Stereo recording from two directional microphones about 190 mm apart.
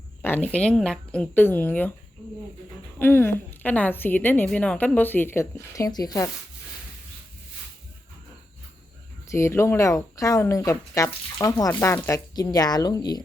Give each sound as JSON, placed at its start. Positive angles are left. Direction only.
{"t": 0.2, "sound": "a woman's voice", "side_deg": 10}
{"t": 3.0, "sound": "a woman's voice", "side_deg": 10}
{"t": 9.2, "sound": "a woman's voice", "side_deg": 15}